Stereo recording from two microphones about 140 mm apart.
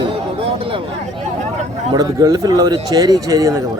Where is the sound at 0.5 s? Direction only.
40° right (ahead or behind).